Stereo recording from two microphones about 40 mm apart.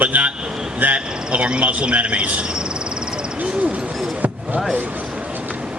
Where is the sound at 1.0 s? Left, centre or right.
Right.